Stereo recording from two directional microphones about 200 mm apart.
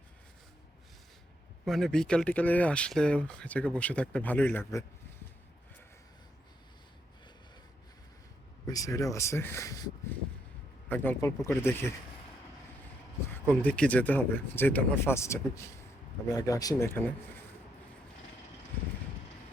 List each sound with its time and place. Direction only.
1.6 s speech: centre (ahead or behind)
8.6 s speech: 15° left (ahead or behind)
13.3 s speech: 5° left (ahead or behind)